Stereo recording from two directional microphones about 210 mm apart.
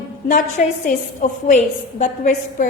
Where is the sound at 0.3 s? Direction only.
35° left (ahead or behind).